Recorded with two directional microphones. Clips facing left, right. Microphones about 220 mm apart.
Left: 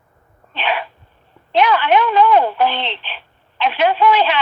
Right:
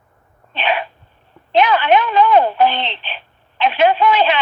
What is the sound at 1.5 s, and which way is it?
A woman's voice, 20° right (ahead or behind).